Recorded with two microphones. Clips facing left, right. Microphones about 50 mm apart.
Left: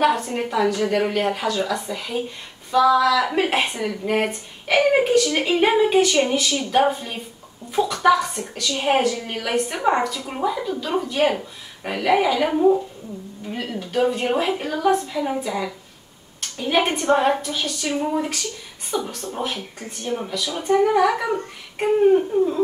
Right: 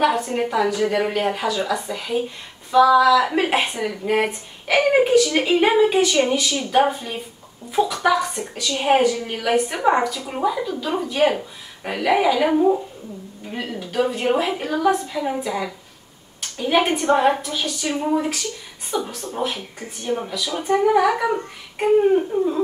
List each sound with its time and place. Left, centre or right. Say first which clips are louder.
0.0 s a woman's voice: right 1 dB; centre
10.1 s speech: right 2 dB; centre
13.9 s a woman's voice: even; centre
20.7 s speech: even; centre